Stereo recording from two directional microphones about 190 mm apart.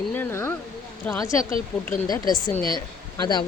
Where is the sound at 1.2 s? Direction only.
15° left (ahead or behind).